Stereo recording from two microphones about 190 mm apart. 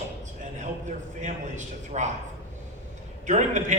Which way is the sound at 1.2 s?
40° right (ahead or behind).